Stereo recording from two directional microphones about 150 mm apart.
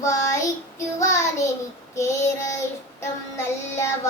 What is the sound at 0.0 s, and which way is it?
Child singing, 20° left (ahead or behind).